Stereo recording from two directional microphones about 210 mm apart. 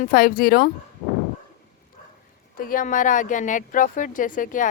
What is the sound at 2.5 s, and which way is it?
Speech, 40° left (ahead or behind).